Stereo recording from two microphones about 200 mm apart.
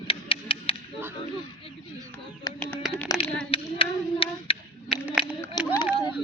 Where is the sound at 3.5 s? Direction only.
25° left (ahead or behind).